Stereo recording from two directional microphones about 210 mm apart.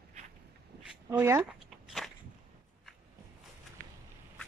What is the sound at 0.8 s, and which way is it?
Speech, 10° right (ahead or behind).